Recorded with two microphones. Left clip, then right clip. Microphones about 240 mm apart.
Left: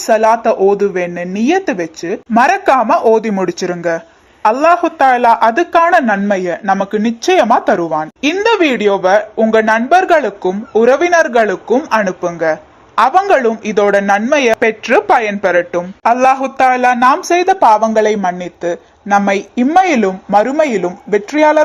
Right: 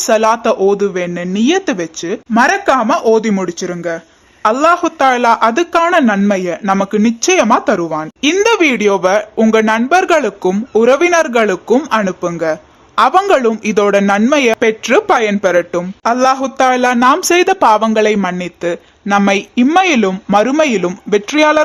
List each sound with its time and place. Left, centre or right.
0.0 s speech: centre
2.3 s a woman's voice: centre; by 17.2 s right
17.2 s a woman's voice: right; by 21.6 s centre